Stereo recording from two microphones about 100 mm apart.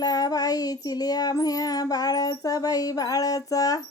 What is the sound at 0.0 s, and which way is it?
Child singing, 40° left (ahead or behind).